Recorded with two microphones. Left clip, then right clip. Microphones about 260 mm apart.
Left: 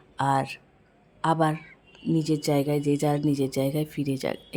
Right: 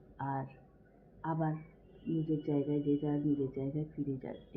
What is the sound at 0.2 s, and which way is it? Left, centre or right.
A woman's voice, left.